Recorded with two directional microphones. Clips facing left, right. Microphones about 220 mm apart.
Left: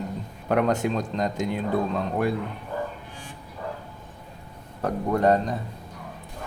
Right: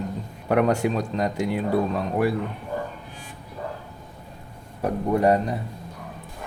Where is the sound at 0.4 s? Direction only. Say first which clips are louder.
Right 2 dB; 10° right (ahead or behind).